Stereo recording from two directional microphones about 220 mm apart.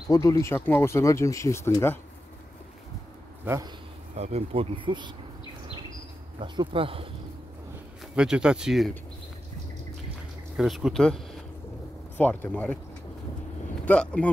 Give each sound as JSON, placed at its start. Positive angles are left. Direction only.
{"t": 0.1, "sound": "speech", "side_deg": 15}
{"t": 3.4, "sound": "speech", "side_deg": -15}
{"t": 4.1, "sound": "speech", "side_deg": -30}
{"t": 6.4, "sound": "speech", "side_deg": -20}
{"t": 8.2, "sound": "speech", "side_deg": -5}
{"t": 10.6, "sound": "speech", "side_deg": 0}
{"t": 13.8, "sound": "speech", "side_deg": 5}